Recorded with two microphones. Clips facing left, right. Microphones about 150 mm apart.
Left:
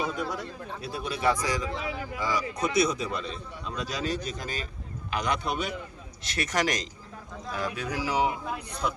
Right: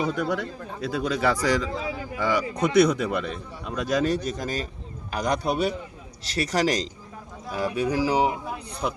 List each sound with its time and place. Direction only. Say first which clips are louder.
0.2 s speech: right 6 dB; 75° right (ahead or behind)
1.7 s a man's voice: right 3 dB; 30° right (ahead or behind)
2.2 s a man's voice: right 5 dB; 65° right (ahead or behind); by 8.6 s 30° right (ahead or behind)